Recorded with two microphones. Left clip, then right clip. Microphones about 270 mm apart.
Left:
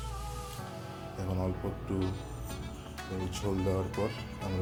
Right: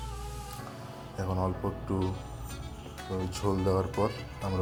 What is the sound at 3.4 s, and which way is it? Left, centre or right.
Speech, centre.